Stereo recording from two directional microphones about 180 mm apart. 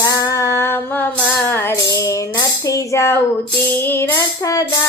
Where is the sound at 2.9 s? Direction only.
15° left (ahead or behind).